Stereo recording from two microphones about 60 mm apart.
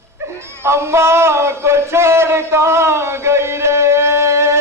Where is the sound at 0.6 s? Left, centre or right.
Right.